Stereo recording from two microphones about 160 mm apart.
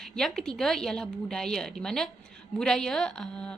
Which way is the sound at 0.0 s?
Centre (ahead or behind).